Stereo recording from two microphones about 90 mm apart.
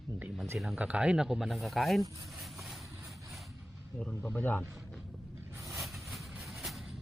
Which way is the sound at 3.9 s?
10° left (ahead or behind).